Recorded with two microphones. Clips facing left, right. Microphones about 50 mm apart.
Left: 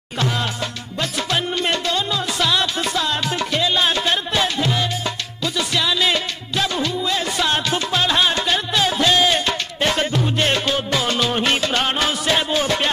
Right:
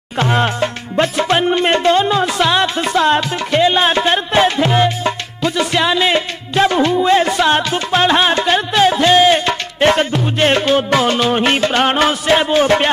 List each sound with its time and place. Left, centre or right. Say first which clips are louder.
0.2 s music: right 8 dB; right